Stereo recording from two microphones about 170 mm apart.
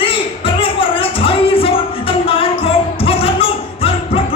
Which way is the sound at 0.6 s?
30° left (ahead or behind).